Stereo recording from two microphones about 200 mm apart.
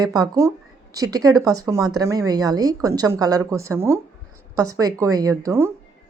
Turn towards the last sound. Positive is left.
turn(degrees=-15)  # may be behind; listen again after turning